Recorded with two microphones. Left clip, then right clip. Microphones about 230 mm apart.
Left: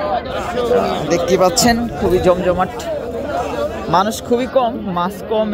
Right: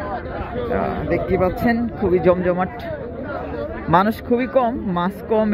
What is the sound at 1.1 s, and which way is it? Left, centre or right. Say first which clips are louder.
Speech: left 6 dB; left.